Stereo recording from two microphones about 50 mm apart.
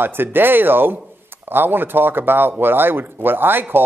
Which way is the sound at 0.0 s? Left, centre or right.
Right.